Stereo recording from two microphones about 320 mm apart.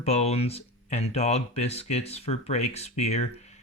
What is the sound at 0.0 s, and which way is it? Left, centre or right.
Speech, centre.